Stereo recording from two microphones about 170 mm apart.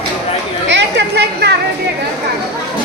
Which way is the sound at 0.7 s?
90° right.